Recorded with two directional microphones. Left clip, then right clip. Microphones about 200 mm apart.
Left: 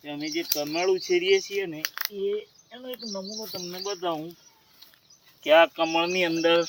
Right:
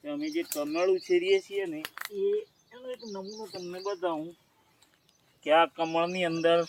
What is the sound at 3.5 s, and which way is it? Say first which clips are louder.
Speech: left 1 dB; 20° left (ahead or behind).